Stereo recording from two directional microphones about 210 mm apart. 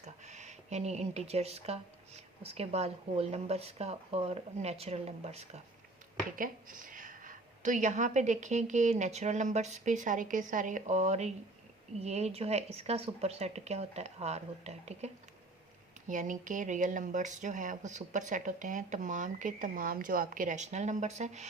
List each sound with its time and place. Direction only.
0.0 s speech: 35° right (ahead or behind)
6.3 s speech: 40° right (ahead or behind)